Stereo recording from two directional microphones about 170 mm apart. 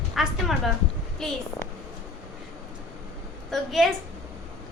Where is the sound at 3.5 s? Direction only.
Centre (ahead or behind).